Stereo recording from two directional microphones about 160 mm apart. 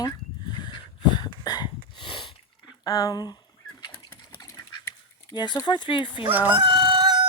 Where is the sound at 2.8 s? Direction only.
20° left (ahead or behind).